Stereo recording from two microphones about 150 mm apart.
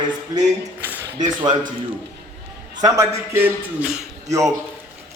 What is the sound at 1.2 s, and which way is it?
Speech, 30° right (ahead or behind).